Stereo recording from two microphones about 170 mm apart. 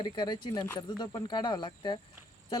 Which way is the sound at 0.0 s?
25° left (ahead or behind).